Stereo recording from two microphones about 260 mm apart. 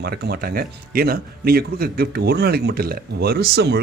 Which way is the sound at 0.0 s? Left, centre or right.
Right.